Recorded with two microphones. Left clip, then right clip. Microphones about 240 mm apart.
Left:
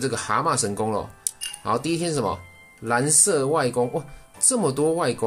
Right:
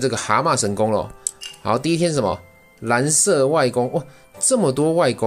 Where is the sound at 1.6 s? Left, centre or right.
Centre.